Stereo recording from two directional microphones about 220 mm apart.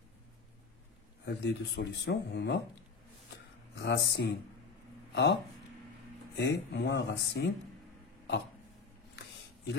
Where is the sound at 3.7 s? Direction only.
50° left (ahead or behind).